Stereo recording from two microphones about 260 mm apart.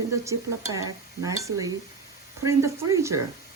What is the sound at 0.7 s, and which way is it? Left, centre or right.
Speech, centre.